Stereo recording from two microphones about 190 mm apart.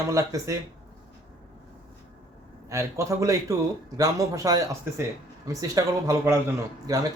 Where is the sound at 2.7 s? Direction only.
15° right (ahead or behind).